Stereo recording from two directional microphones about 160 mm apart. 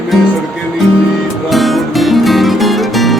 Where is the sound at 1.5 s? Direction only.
Centre (ahead or behind).